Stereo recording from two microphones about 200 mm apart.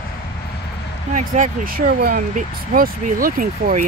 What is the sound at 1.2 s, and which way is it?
Speech, 45° right (ahead or behind).